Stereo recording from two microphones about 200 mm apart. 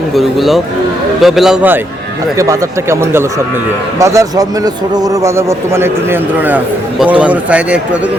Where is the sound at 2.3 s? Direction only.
15° right (ahead or behind).